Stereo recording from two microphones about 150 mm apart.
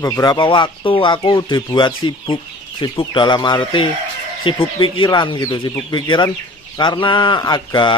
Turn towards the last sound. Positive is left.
turn(degrees=30)  # may be behind; listen again after turning